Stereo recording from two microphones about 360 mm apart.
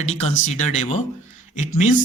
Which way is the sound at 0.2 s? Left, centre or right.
Centre.